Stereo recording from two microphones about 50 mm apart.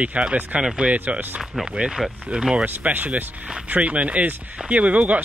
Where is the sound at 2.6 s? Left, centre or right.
Right.